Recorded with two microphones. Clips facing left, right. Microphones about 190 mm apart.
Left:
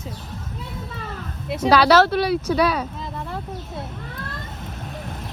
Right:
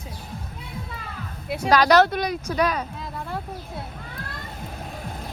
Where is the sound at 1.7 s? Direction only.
15° right (ahead or behind).